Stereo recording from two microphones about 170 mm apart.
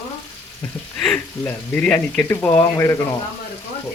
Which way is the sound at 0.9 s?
5° left (ahead or behind).